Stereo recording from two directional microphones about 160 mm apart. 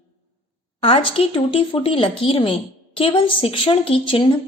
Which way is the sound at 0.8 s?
35° left (ahead or behind).